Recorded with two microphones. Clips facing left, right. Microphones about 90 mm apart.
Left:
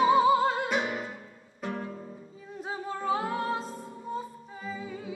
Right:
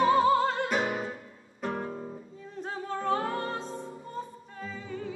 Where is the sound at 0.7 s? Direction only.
40° right (ahead or behind).